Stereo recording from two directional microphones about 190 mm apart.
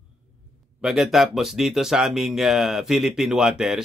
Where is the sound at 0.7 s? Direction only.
Centre (ahead or behind).